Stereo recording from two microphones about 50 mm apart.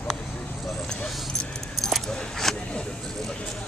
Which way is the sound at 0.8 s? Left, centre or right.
Centre.